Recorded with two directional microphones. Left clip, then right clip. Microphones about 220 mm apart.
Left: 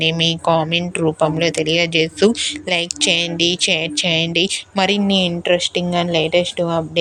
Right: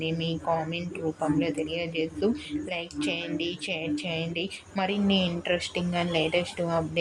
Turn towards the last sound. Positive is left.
turn(degrees=30)  # may be behind; listen again after turning